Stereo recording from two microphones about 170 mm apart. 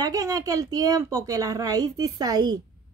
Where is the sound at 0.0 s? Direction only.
20° right (ahead or behind).